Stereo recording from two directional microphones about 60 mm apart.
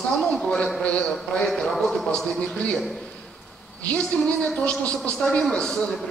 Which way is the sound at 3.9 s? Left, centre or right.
Left.